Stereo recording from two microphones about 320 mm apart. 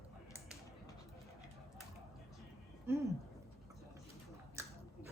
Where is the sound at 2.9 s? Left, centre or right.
Centre.